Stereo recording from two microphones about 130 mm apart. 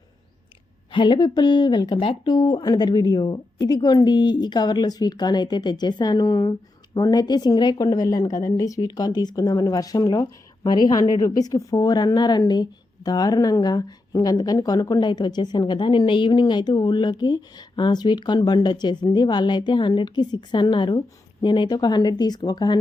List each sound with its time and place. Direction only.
0.9 s a woman's voice: 35° left (ahead or behind)